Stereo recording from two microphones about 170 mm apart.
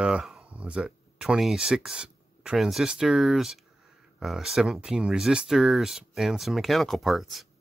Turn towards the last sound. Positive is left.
turn(degrees=0)  # may be behind; listen again after turning